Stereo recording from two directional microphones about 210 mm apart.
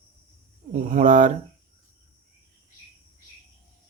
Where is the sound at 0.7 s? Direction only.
40° right (ahead or behind).